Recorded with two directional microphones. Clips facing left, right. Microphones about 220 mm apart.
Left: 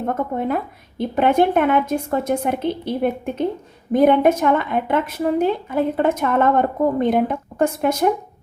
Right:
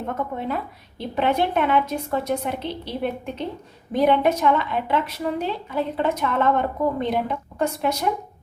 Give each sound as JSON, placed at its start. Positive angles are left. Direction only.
{"t": 0.3, "sound": "a woman's voice", "side_deg": 50}